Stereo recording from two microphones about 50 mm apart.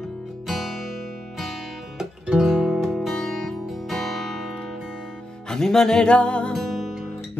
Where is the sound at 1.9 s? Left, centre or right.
Centre.